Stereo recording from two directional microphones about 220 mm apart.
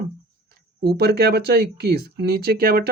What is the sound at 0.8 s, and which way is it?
Speech, 45° right (ahead or behind).